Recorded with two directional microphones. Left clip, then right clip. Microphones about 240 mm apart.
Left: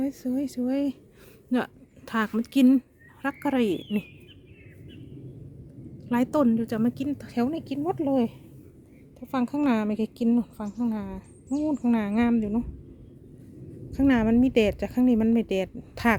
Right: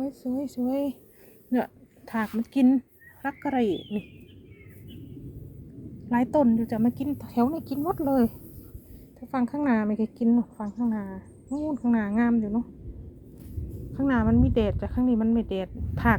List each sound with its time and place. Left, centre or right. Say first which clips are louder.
0.2 s speech: even; left
0.6 s speech: right 2 dB; left
6.1 s speech: right 1 dB; left
9.3 s speech: left 1 dB; centre
13.9 s speech: left 2 dB; left